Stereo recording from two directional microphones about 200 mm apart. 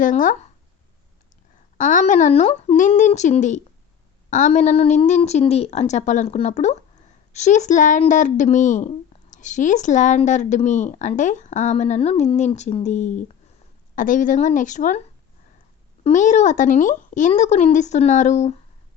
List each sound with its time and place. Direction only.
0.0 s speech: 40° left (ahead or behind)
1.9 s speech: 40° left (ahead or behind)
16.0 s speech: 35° left (ahead or behind)